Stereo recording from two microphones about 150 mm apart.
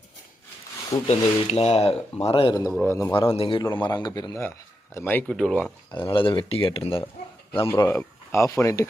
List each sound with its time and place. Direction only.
1.0 s speech: 45° left (ahead or behind)
2.8 s speech: 15° left (ahead or behind)
3.2 s speech: 35° left (ahead or behind)
4.9 s speech: 15° left (ahead or behind)
6.1 s speech: 35° left (ahead or behind)
7.7 s speech: 15° left (ahead or behind)